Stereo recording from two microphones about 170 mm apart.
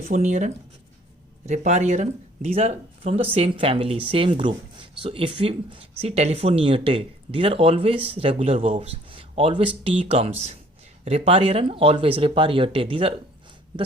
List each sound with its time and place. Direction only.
0.0 s speech: 50° right (ahead or behind); by 13.1 s 30° right (ahead or behind)